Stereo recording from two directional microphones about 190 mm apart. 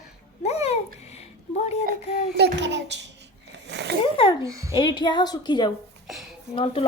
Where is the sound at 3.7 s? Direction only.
65° right (ahead or behind).